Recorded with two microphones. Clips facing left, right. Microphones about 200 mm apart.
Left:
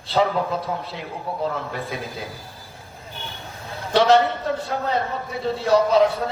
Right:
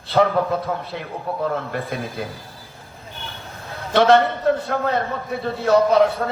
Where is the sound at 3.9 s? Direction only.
55° right (ahead or behind).